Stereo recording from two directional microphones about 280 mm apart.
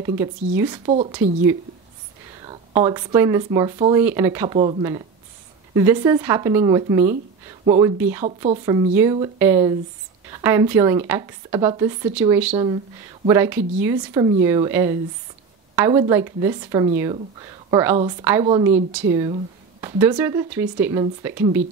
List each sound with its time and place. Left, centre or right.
0.0 s speech: centre
2.4 s speech: centre
8.0 s speech: centre
19.8 s speech: centre